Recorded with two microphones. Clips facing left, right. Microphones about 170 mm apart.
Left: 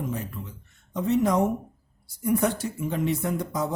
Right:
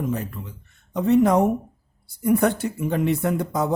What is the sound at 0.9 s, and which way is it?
Speech, 60° right (ahead or behind).